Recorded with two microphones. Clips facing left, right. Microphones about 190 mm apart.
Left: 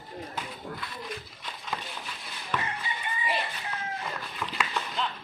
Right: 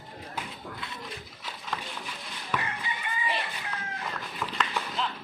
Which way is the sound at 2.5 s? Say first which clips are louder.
Even; 10° right (ahead or behind).